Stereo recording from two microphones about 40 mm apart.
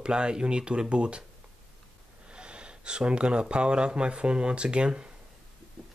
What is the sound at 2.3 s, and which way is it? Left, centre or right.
Speech, right.